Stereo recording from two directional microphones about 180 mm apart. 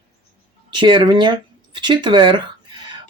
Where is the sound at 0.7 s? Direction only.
25° right (ahead or behind).